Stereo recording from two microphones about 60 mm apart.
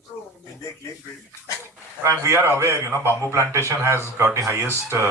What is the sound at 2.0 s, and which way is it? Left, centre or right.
A man's voice, right.